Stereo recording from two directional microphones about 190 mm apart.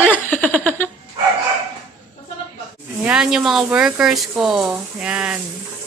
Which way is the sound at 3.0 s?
5° right (ahead or behind).